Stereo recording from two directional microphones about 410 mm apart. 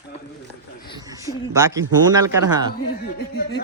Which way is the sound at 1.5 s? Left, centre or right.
Centre.